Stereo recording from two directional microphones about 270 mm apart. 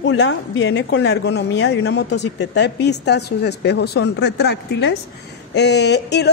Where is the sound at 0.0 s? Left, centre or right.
Left.